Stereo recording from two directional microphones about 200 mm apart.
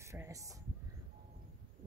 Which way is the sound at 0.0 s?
15° right (ahead or behind).